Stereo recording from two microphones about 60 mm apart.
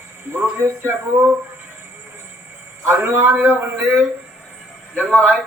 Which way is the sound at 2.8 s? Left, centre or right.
Right.